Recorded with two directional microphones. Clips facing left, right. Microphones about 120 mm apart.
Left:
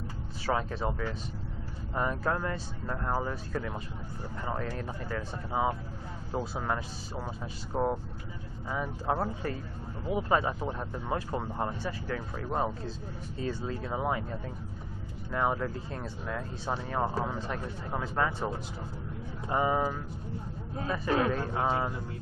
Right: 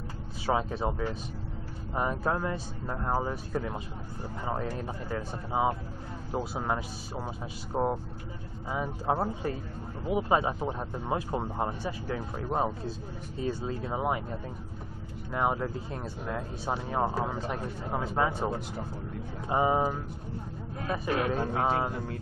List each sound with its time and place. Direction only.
0.5 s speech: 15° right (ahead or behind)